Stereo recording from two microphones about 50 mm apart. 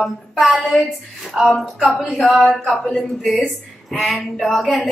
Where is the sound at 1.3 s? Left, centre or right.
Centre.